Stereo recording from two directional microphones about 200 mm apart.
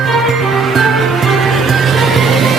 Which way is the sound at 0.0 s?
Centre (ahead or behind).